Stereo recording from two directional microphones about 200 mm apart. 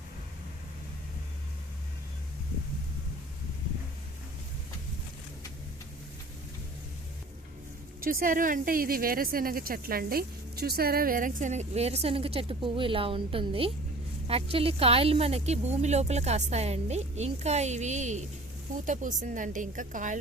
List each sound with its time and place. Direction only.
8.0 s speech: 45° right (ahead or behind)